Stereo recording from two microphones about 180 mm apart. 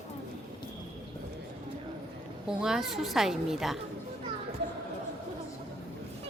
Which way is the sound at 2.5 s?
5° right (ahead or behind).